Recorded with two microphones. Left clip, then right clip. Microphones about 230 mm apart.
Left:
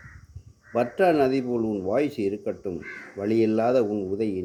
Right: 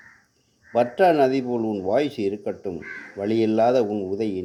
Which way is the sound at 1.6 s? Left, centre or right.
Right.